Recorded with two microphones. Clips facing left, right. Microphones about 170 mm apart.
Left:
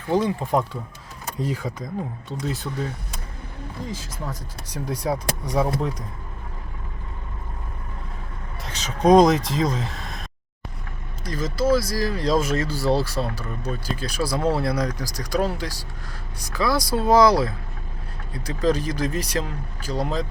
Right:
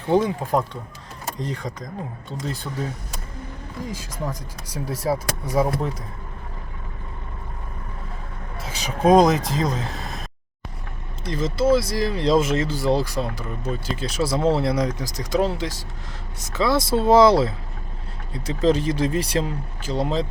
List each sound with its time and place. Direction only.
0.1 s speech: 15° right (ahead or behind)
1.4 s speech: 5° left (ahead or behind)
3.9 s speech: 10° right (ahead or behind)
8.5 s speech: 5° right (ahead or behind)
11.2 s speech: 25° right (ahead or behind)